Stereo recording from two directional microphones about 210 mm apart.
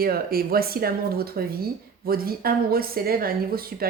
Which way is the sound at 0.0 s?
45° right (ahead or behind).